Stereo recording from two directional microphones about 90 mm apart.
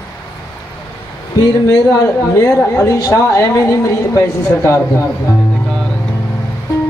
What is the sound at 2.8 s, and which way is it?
A man's voice, 35° left (ahead or behind).